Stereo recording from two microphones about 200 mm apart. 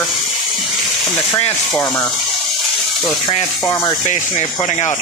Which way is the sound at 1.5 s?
10° left (ahead or behind).